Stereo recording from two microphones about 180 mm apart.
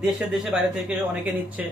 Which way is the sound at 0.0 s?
5° right (ahead or behind).